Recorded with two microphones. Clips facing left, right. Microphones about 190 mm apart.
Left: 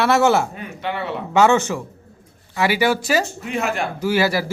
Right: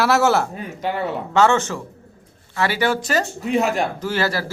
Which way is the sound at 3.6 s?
35° right (ahead or behind).